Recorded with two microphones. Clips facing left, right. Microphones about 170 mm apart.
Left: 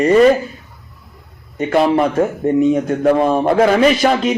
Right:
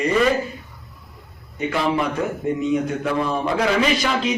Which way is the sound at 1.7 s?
50° left (ahead or behind).